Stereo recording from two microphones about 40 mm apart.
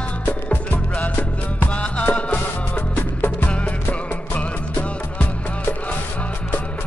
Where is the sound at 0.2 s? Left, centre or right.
Left.